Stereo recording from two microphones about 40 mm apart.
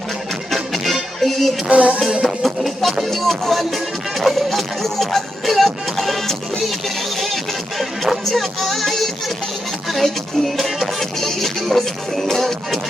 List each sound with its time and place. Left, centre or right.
0.5 s music: centre
1.7 s music: right
2.2 s music: centre
4.2 s speech: centre
6.7 s music: centre
10.6 s music: centre